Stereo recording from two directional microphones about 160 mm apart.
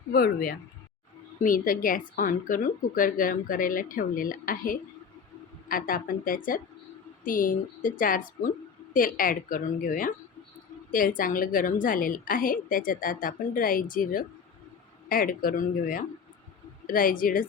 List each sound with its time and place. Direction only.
0.1 s speech: 70° left (ahead or behind)
1.4 s a woman's voice: 60° left (ahead or behind)